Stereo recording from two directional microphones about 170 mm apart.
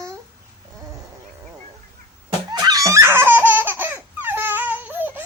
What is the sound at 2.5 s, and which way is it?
Laughter, 20° right (ahead or behind).